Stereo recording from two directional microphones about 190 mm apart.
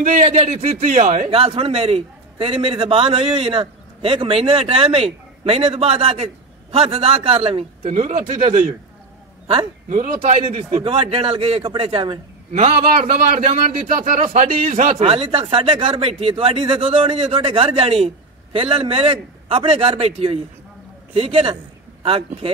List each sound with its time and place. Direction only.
0.0 s a man's voice: 40° right (ahead or behind)
1.3 s a man's voice: 30° right (ahead or behind)
12.5 s a man's voice: 40° right (ahead or behind)